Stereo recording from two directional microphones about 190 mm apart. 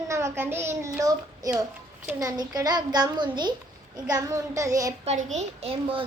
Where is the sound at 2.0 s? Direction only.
20° right (ahead or behind).